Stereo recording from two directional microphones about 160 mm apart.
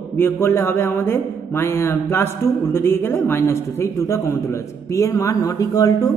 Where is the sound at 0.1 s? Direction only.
15° left (ahead or behind).